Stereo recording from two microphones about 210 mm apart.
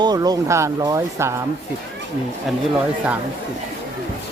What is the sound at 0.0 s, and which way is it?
Speech, 20° right (ahead or behind).